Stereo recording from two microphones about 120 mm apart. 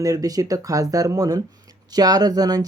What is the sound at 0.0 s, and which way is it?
Speech, 30° right (ahead or behind).